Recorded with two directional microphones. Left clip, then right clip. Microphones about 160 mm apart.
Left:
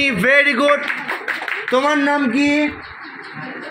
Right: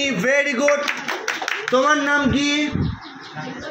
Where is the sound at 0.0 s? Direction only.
50° left (ahead or behind).